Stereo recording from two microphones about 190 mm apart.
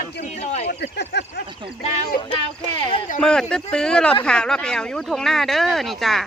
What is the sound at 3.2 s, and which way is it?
Speech, 5° left (ahead or behind).